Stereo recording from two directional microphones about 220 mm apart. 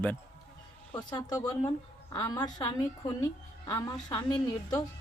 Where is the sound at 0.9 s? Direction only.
20° left (ahead or behind).